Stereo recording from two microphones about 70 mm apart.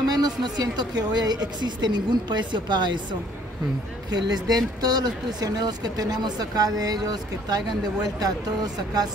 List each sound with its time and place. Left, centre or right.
0.1 s a woman's voice: right
4.1 s speech: right